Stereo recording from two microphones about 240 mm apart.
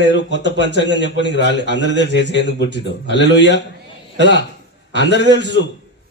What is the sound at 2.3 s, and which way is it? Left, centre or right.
A man's voice, left.